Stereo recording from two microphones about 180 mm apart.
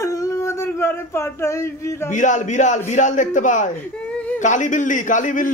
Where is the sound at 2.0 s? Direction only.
45° left (ahead or behind).